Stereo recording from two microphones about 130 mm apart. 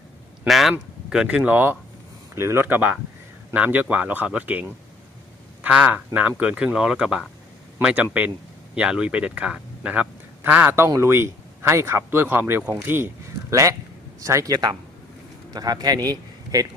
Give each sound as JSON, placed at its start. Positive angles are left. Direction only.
{"t": 0.4, "sound": "a man's voice", "side_deg": 0}
{"t": 5.6, "sound": "a man's voice", "side_deg": -10}
{"t": 16.0, "sound": "a sound", "side_deg": -25}